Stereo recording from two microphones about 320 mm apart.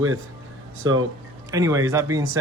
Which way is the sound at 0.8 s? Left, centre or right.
Right.